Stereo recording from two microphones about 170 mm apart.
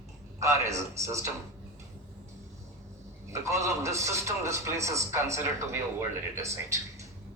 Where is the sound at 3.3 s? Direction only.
15° right (ahead or behind).